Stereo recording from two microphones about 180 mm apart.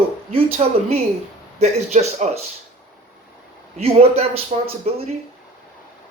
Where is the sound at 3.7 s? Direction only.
35° right (ahead or behind).